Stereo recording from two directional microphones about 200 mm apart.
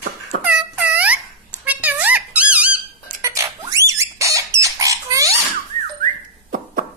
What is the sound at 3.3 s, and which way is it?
Bird, 15° right (ahead or behind).